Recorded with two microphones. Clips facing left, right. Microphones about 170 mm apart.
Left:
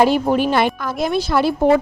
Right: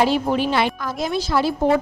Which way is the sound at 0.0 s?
50° left (ahead or behind).